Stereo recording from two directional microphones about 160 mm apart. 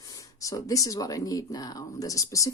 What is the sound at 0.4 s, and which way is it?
Speech, 20° left (ahead or behind).